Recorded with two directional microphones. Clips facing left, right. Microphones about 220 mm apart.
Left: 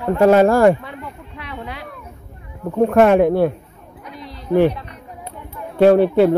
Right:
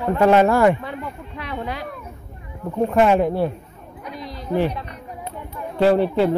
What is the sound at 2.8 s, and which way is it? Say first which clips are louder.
Speech: left 4 dB; 60° left (ahead or behind).